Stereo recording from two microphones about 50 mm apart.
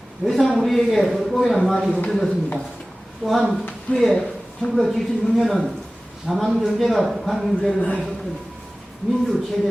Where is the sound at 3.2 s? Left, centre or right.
Centre.